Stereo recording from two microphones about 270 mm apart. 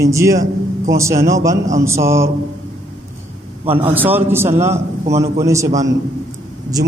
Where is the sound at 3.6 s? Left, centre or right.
Centre.